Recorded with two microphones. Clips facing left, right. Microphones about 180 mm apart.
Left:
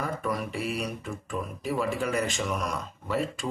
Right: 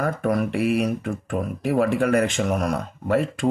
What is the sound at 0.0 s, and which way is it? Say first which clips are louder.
Speech: right 8 dB; 55° right (ahead or behind).